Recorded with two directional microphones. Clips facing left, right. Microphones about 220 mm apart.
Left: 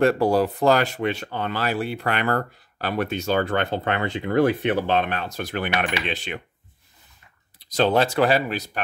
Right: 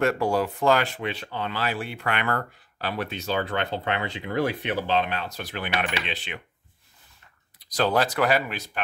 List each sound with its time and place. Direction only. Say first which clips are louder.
0.0 s speech: left 5 dB; 35° left (ahead or behind)
2.9 s speech: left 5 dB; 50° left (ahead or behind)
7.5 s speech: left 4 dB; 25° left (ahead or behind)